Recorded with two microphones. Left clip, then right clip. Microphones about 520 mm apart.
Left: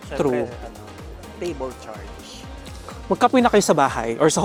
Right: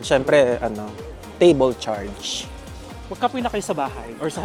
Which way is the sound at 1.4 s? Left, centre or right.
Right.